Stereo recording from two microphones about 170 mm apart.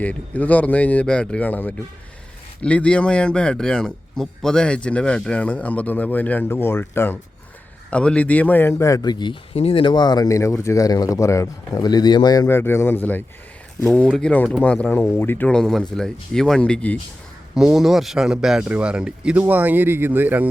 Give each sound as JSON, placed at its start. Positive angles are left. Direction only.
{"t": 0.0, "sound": "a man's voice", "side_deg": 10}